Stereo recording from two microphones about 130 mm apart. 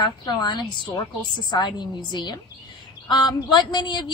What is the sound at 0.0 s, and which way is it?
A woman's voice, 35° left (ahead or behind).